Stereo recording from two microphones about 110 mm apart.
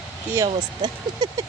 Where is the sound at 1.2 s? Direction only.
35° right (ahead or behind).